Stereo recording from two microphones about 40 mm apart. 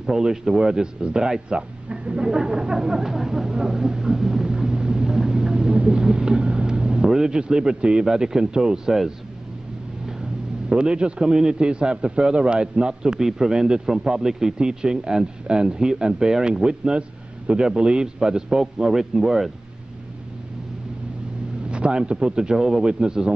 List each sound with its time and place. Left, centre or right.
0.0 s a man's voice: centre
1.6 s a sound: right
7.3 s a man's voice: centre
10.7 s a man's voice: right
13.2 s a man's voice: centre
21.6 s a man's voice: right